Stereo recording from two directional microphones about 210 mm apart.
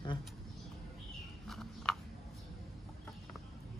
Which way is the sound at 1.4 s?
Centre (ahead or behind).